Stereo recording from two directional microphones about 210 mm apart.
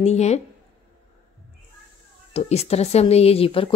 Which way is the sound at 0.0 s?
30° left (ahead or behind).